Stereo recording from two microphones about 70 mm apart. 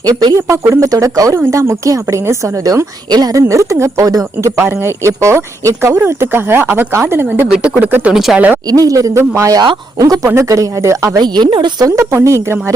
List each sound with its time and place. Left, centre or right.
0.0 s speech: right
0.3 s a woman's voice: right
3.1 s speech: right
3.3 s a woman's voice: right
4.4 s speech: right
6.0 s speech: right
7.4 s speech: centre
7.8 s speech: right
8.1 s speech: centre
8.6 s speech: right
9.6 s speech: right
10.3 s a woman's voice: right
11.2 s speech: right
11.9 s a woman's voice: right